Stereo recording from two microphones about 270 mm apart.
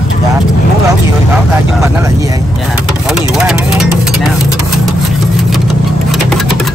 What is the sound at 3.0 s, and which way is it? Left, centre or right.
Speech, centre.